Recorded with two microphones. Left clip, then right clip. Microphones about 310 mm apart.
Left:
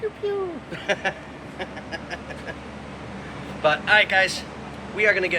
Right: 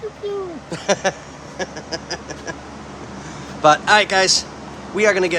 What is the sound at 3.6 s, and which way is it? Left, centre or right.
Speech, centre.